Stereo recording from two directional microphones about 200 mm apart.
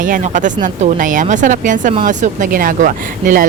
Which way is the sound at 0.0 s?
40° right (ahead or behind).